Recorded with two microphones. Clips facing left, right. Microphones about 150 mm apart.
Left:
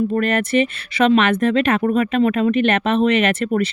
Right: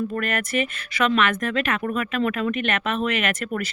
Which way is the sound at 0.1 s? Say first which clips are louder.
Left 8 dB; 30° left (ahead or behind).